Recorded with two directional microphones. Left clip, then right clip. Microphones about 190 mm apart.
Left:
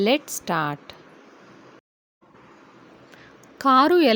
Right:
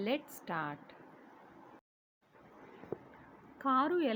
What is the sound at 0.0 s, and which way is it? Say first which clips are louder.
Speech: left 15 dB; 65° left (ahead or behind).